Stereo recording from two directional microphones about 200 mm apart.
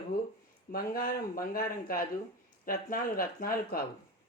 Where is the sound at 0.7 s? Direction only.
45° left (ahead or behind).